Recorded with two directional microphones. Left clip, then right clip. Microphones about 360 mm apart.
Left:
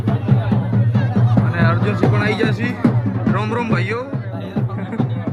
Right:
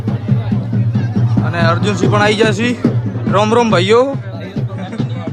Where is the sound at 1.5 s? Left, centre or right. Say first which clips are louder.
Right 6 dB; centre.